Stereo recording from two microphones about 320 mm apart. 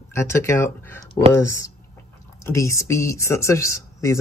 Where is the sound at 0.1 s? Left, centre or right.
Centre.